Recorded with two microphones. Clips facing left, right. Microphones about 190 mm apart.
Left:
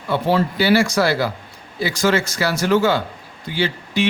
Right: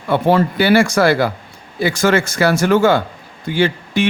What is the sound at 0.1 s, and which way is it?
Speech, 55° right (ahead or behind).